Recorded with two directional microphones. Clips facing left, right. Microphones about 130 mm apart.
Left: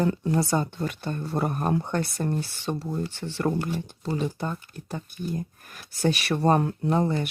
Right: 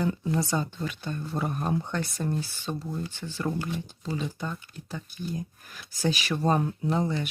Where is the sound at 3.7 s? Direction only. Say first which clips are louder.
Left 3 dB; 50° left (ahead or behind).